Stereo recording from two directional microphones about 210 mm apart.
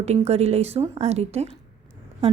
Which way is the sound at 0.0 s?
30° right (ahead or behind).